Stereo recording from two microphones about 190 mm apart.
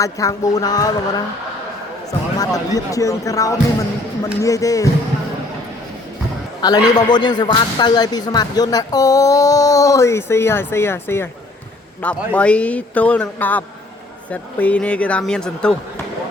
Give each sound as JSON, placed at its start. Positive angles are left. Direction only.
{"t": 0.0, "sound": "speech", "side_deg": 15}
{"t": 2.4, "sound": "a man's voice", "side_deg": 20}
{"t": 6.6, "sound": "a man's voice", "side_deg": 20}